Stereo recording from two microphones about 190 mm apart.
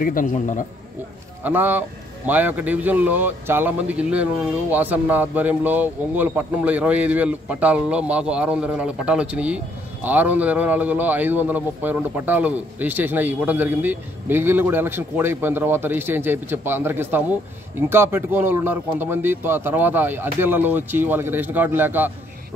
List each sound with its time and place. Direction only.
0.0 s a man's voice: 45° left (ahead or behind)
1.4 s a man's voice: 10° right (ahead or behind)